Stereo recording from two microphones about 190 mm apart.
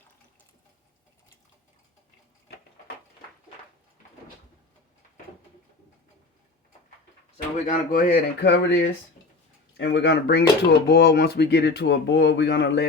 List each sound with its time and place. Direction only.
7.7 s speech: 45° left (ahead or behind); by 12.8 s 65° left (ahead or behind)